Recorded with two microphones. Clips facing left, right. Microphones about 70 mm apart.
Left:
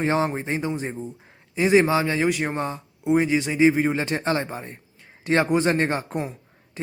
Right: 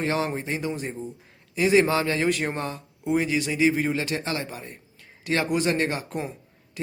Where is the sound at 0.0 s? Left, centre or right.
Left.